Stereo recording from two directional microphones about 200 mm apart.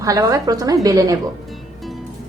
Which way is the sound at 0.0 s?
15° right (ahead or behind).